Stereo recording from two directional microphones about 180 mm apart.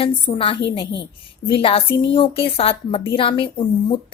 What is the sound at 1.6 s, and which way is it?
A woman's voice, 30° left (ahead or behind).